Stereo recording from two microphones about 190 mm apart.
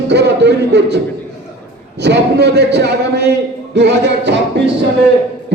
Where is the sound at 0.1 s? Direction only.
65° right (ahead or behind).